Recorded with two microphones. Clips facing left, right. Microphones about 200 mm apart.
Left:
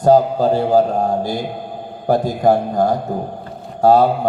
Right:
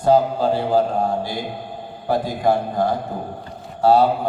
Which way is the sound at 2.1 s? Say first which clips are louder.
Left 4 dB; 45° left (ahead or behind).